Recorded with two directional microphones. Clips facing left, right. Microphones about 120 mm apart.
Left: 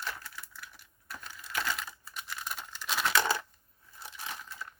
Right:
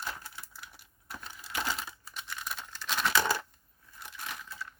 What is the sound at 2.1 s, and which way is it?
Crumpling, 5° left (ahead or behind).